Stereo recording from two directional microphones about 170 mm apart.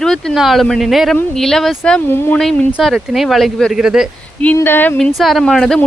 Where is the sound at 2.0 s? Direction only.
15° left (ahead or behind).